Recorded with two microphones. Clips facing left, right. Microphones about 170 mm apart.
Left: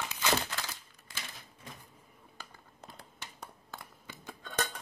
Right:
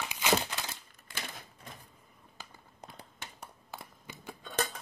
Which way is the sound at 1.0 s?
60° right (ahead or behind).